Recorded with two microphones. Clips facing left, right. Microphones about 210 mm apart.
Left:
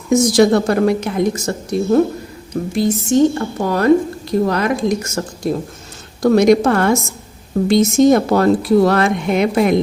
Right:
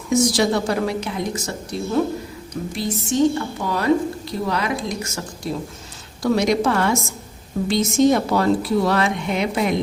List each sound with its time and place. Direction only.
0.1 s a woman's voice: 50° left (ahead or behind)